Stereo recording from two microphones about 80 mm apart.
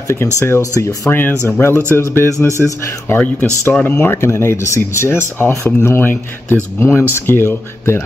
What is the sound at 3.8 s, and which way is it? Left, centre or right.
Speech, left.